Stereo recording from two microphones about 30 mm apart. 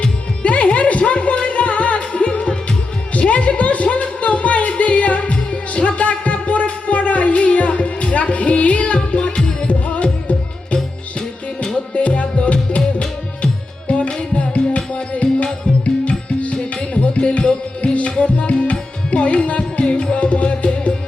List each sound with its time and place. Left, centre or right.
0.4 s music: left
3.2 s a sound: left
4.2 s music: left
9.1 s music: left
11.9 s music: left
18.2 s tabla: left
19.8 s music: left
20.3 s music: left